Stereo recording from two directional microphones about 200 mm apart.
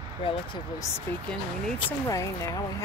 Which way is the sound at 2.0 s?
15° left (ahead or behind).